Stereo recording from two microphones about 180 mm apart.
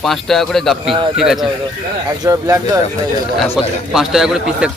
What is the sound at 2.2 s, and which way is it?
Speech, 15° right (ahead or behind).